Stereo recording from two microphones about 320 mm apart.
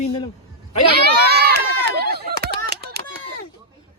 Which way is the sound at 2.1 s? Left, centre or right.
Right.